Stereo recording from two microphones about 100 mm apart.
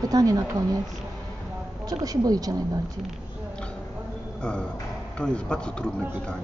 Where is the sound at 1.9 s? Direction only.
40° right (ahead or behind).